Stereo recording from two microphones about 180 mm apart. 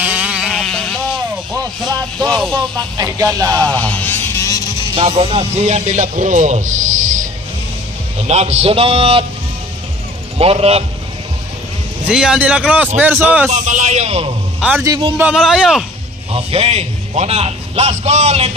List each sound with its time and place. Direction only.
0.0 s sheep: 10° right (ahead or behind)
1.5 s a sound: 20° right (ahead or behind)
2.2 s vehicle: 5° left (ahead or behind)
2.5 s speech: 20° right (ahead or behind)
3.6 s vehicle: 10° left (ahead or behind)
4.9 s a man's voice: 35° right (ahead or behind)
10.3 s a man's voice: 35° right (ahead or behind)
12.1 s speech: 5° right (ahead or behind)
13.5 s a man's voice: 45° right (ahead or behind)
14.6 s a man's voice: 5° right (ahead or behind)
16.3 s a man's voice: 30° right (ahead or behind)